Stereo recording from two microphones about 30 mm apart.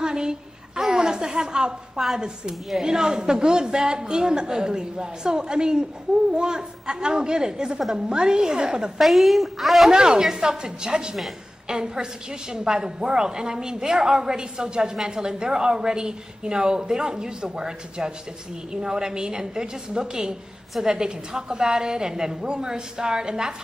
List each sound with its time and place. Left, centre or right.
0.0 s a sound: right
0.7 s a woman's voice: right
9.0 s a woman's voice: centre
9.8 s a woman's voice: right